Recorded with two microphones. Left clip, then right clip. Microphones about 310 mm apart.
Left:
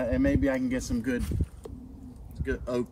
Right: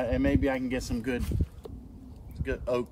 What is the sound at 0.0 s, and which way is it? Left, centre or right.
Speech, right.